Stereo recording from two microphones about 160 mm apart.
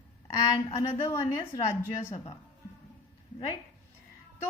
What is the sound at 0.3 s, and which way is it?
A woman's voice, 25° left (ahead or behind).